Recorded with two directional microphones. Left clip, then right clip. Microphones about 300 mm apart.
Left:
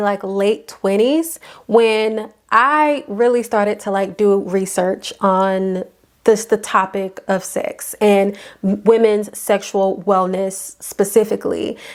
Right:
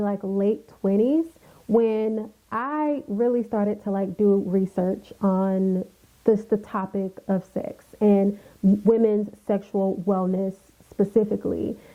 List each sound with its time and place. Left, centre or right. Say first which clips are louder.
0.0 s a woman's voice: left 8 dB; centre
9.7 s speech: left 8 dB; left
10.1 s a woman's voice: left 9 dB; centre